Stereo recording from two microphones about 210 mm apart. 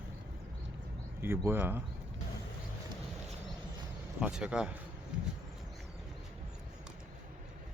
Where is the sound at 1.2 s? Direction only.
10° right (ahead or behind).